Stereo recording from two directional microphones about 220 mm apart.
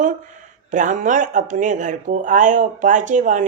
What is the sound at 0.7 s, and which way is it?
Speech, 35° right (ahead or behind).